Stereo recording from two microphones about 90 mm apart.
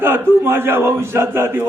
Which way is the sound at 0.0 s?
25° right (ahead or behind).